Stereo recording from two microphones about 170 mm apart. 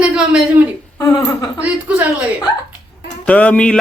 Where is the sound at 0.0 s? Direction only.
5° right (ahead or behind).